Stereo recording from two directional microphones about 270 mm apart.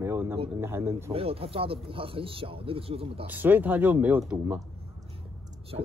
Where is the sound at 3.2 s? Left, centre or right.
Centre.